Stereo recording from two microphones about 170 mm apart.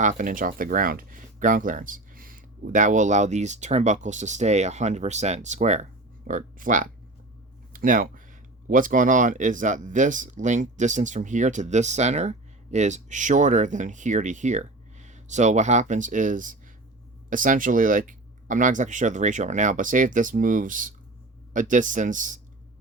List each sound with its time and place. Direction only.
0.0 s speech: 50° right (ahead or behind)